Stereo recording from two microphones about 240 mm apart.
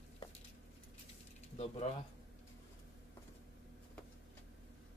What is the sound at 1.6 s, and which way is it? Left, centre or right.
Speech, left.